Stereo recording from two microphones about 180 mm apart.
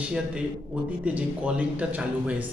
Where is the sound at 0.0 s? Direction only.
5° right (ahead or behind).